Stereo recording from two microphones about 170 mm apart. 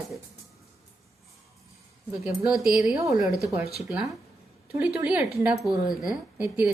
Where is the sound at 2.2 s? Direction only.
Centre (ahead or behind).